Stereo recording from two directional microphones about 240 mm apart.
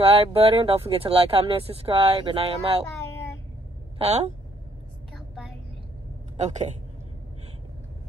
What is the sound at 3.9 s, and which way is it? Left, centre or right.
Speech, right.